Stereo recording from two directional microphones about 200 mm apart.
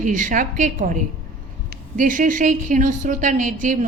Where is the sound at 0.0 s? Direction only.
40° right (ahead or behind).